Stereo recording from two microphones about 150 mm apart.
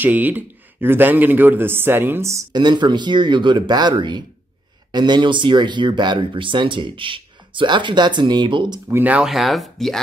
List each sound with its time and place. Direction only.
0.0 s speech: 10° right (ahead or behind); by 8.8 s 30° right (ahead or behind)
8.9 s speech: 10° right (ahead or behind)